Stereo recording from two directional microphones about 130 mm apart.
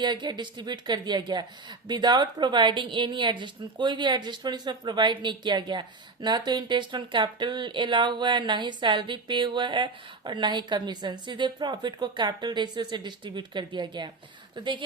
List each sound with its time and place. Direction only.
0.0 s speech: 35° right (ahead or behind)